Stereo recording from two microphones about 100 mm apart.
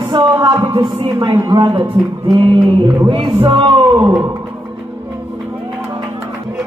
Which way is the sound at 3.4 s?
55° right (ahead or behind).